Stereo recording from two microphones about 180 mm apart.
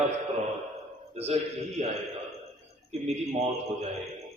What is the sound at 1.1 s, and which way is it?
Speech, 35° right (ahead or behind).